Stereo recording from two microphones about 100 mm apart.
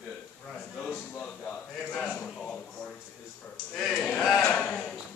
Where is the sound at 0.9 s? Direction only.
10° left (ahead or behind).